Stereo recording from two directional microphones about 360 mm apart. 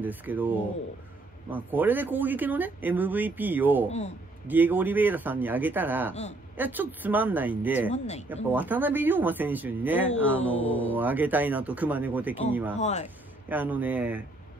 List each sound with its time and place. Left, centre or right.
0.0 s speech: centre
12.7 s speech: centre
13.5 s speech: centre